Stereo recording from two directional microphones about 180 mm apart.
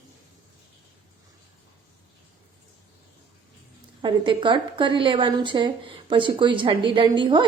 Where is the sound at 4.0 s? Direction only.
25° right (ahead or behind).